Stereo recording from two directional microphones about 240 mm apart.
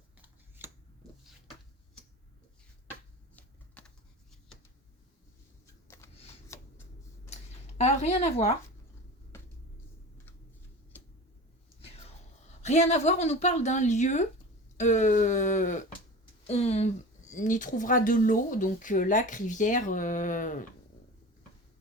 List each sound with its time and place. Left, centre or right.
0.2 s a sound: centre
3.3 s typing: centre
6.5 s shuffling cards: centre
7.8 s speech: left
11.8 s whispering: left
12.6 s speech: left